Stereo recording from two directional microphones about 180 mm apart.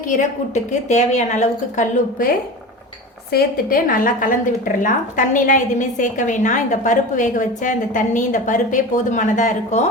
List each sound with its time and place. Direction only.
0.2 s a woman's voice: 40° left (ahead or behind)
3.3 s a woman's voice: 50° left (ahead or behind)